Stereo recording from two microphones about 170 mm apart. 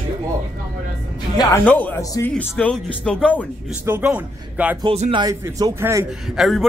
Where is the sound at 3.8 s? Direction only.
10° right (ahead or behind).